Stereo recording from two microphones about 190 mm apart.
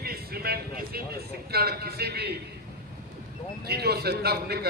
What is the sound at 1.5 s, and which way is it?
Speech, 55° right (ahead or behind).